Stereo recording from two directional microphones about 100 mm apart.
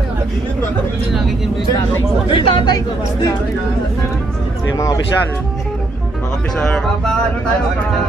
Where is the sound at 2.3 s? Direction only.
55° left (ahead or behind).